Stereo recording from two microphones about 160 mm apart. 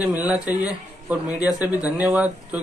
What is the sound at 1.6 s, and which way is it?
Speech, 20° left (ahead or behind).